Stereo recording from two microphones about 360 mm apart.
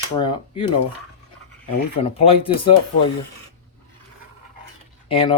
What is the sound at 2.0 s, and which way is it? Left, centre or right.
Speech, centre.